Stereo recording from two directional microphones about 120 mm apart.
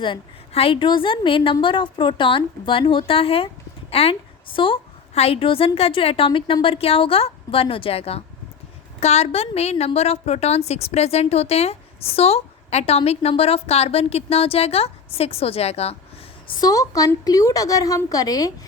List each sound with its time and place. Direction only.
0.0 s a woman's voice: 50° left (ahead or behind)
16.6 s a woman's voice: 30° left (ahead or behind)